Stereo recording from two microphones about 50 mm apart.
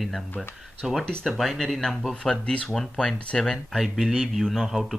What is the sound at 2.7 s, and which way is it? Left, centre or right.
Speech, centre.